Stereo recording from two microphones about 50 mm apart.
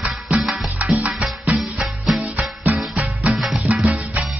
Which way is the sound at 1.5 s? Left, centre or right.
Right.